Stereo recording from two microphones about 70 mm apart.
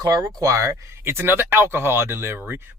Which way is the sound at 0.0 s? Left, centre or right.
Right.